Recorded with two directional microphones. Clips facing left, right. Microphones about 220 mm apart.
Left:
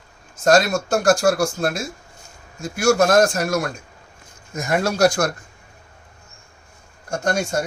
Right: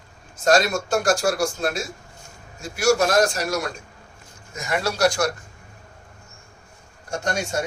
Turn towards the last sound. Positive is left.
turn(degrees=45)  # may be behind; listen again after turning